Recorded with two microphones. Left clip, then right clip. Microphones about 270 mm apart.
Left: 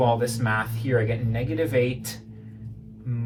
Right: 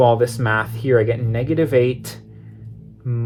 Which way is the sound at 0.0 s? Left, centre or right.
Right.